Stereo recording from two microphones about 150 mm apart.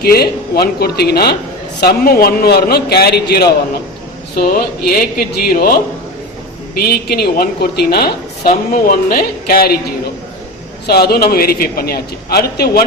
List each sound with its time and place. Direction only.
0.0 s a woman's voice: 90° left
6.7 s a woman's voice: 90° left